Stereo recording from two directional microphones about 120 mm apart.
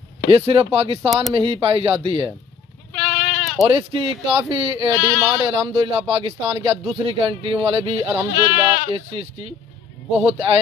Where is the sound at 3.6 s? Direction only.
50° right (ahead or behind).